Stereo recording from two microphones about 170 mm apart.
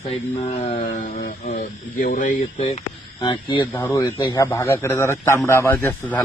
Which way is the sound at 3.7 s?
15° left (ahead or behind).